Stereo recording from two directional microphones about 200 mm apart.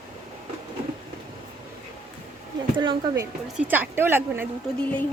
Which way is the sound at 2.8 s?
25° right (ahead or behind).